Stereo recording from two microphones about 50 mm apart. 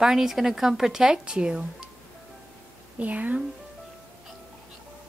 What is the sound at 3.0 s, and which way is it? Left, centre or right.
Speech, right.